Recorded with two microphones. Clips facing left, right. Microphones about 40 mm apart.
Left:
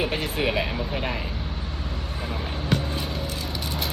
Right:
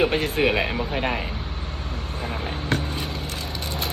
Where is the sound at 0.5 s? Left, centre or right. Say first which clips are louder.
Right 3 dB; right.